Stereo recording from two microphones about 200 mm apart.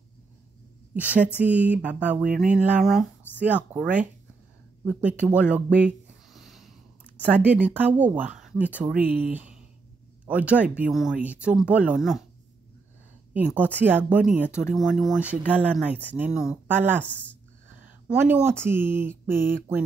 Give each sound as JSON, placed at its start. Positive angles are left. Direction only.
{"t": 0.9, "sound": "speech", "side_deg": -10}
{"t": 13.3, "sound": "a woman's voice", "side_deg": -10}
{"t": 17.0, "sound": "speech", "side_deg": 5}
{"t": 18.0, "sound": "speech", "side_deg": -10}